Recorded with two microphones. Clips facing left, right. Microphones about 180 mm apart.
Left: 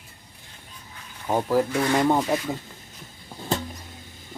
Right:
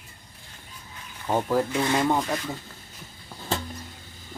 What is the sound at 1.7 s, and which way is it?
Speech, 20° right (ahead or behind).